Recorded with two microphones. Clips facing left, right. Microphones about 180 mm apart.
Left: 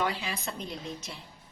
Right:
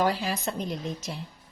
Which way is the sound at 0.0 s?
40° right (ahead or behind).